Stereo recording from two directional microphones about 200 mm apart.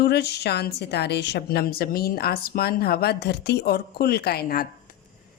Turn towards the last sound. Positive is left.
turn(degrees=50)  # may be behind; listen again after turning